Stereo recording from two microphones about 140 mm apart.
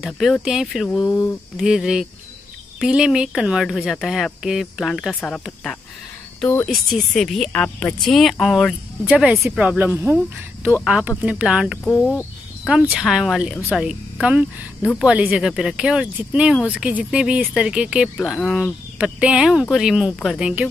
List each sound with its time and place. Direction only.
0.0 s speech: centre (ahead or behind)
1.0 s speech: 15° left (ahead or behind)
1.6 s speech: 5° right (ahead or behind)